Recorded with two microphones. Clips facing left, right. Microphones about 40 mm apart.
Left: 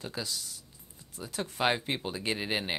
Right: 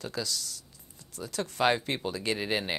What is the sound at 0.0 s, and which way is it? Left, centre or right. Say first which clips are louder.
Speech: right 3 dB; centre.